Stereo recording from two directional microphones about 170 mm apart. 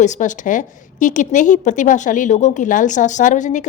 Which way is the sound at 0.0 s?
45° left (ahead or behind).